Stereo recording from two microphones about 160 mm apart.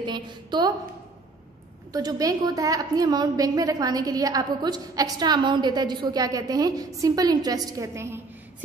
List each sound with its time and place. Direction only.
0.0 s a woman's voice: 30° right (ahead or behind)
1.9 s a woman's voice: 25° right (ahead or behind)